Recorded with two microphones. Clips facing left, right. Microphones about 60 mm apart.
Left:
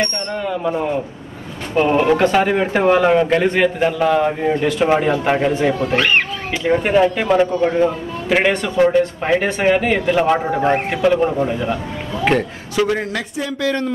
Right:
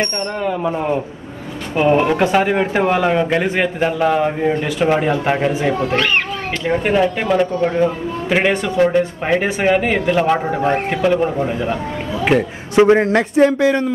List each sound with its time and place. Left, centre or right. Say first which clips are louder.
0.0 s speech: right 1 dB; right
1.8 s a man's voice: even; centre
5.9 s speech: left 3 dB; centre
6.6 s a man's voice: left 2 dB; centre
12.7 s speech: right 7 dB; right
13.6 s speech: right 4 dB; centre